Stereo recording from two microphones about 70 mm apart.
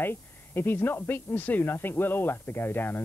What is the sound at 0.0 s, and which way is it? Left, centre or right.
Speech, left.